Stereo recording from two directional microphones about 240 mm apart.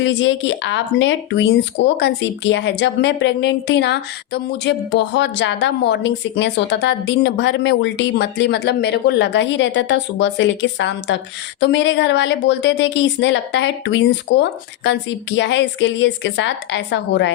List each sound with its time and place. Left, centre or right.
0.0 s speech: left